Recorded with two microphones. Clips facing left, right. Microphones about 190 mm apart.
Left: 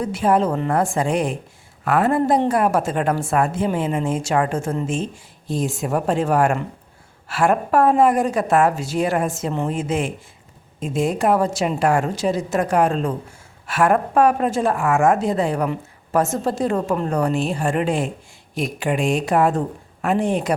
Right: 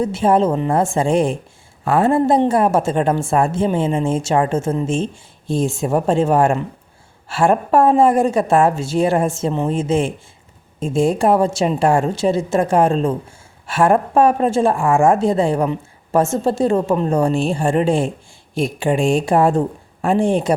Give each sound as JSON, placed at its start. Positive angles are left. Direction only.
{"t": 0.0, "sound": "a woman's voice", "side_deg": -25}